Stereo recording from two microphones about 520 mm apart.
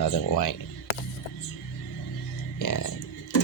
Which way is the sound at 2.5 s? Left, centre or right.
Left.